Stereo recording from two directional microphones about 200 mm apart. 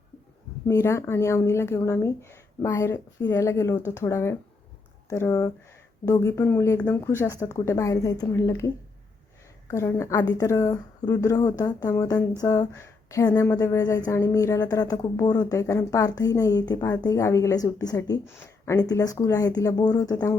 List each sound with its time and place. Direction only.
0.7 s speech: 15° left (ahead or behind)